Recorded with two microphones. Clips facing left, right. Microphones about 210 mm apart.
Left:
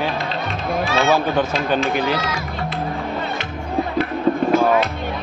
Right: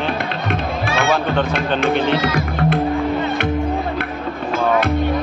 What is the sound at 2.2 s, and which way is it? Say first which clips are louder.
Speech: right 7 dB; 60° right (ahead or behind).